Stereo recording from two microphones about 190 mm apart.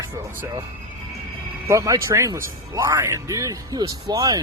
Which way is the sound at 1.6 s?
15° right (ahead or behind).